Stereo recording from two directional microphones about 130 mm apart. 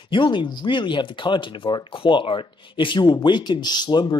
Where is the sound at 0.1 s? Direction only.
40° left (ahead or behind).